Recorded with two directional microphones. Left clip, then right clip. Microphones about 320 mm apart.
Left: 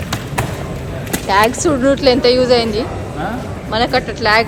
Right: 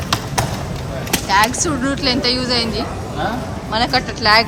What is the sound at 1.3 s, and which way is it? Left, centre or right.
Speech, centre.